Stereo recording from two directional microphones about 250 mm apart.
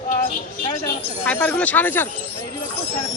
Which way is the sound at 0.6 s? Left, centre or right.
Centre.